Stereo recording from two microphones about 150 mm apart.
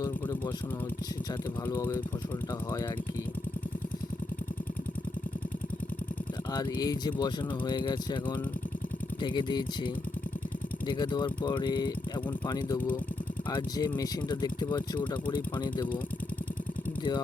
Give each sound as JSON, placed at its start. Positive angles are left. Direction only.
{"t": 1.6, "sound": "speech", "side_deg": 15}
{"t": 6.5, "sound": "speech", "side_deg": 30}
{"t": 9.2, "sound": "speech", "side_deg": 30}
{"t": 12.5, "sound": "speech", "side_deg": 20}
{"t": 13.5, "sound": "speech", "side_deg": 30}